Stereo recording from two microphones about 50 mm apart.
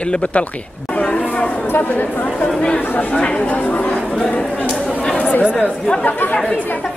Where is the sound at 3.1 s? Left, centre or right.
Left.